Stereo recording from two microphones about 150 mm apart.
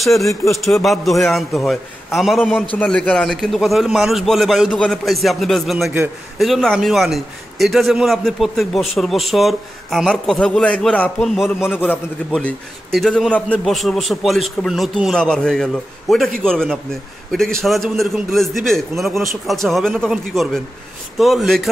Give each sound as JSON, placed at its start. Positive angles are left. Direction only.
{"t": 0.0, "sound": "a man's voice", "side_deg": 0}
{"t": 11.7, "sound": "a man's voice", "side_deg": 15}
{"t": 12.3, "sound": "a man's voice", "side_deg": 0}